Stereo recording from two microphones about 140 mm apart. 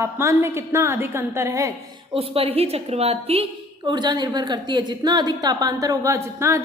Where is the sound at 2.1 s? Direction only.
45° right (ahead or behind).